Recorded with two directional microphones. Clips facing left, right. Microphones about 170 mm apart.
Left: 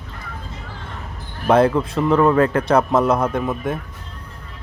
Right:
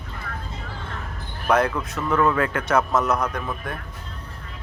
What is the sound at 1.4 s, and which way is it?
Speech, 30° left (ahead or behind).